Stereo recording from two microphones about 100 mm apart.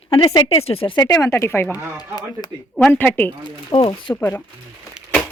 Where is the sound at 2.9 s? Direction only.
20° left (ahead or behind).